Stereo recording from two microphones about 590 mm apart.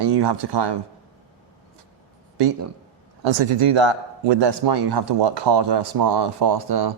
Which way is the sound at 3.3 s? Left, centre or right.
Right.